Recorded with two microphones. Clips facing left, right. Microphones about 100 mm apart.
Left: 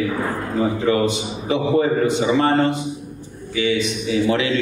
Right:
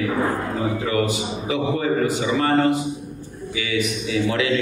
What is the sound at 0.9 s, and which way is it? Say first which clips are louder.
A man's voice: left 3 dB; 30° left (ahead or behind).